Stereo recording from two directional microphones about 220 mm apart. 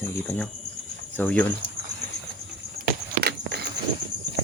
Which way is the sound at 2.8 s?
50° right (ahead or behind).